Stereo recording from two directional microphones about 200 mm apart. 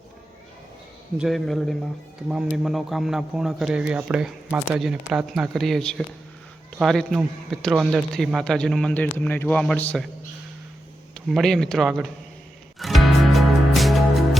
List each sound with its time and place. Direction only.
1.2 s speech: centre (ahead or behind)
11.3 s speech: centre (ahead or behind)
12.8 s music: centre (ahead or behind)